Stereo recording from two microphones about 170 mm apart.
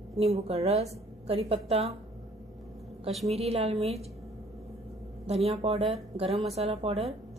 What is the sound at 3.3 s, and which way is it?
Speech, 35° right (ahead or behind).